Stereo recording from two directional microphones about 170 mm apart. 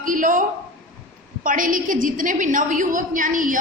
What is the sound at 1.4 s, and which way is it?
A woman's voice, 50° right (ahead or behind).